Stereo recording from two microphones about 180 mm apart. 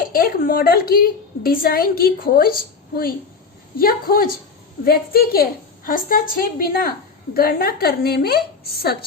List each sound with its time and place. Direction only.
0.0 s a woman's voice: 55° left (ahead or behind)